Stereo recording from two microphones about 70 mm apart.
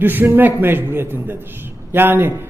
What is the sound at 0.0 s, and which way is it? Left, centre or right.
A man's voice, right.